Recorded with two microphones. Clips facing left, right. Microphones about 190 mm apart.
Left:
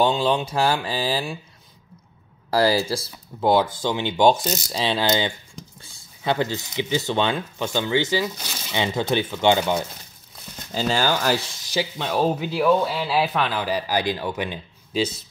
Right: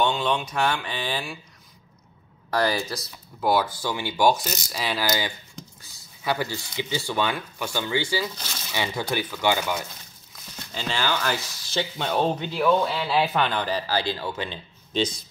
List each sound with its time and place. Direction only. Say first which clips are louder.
0.0 s speech: left 4 dB; 30° left (ahead or behind)
2.5 s speech: left 5 dB; 30° left (ahead or behind)
10.7 s speech: left 5 dB; 40° left (ahead or behind)
11.7 s speech: left 1 dB; 5° left (ahead or behind)